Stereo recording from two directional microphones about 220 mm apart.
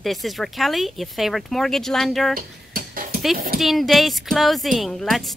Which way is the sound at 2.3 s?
40° right (ahead or behind).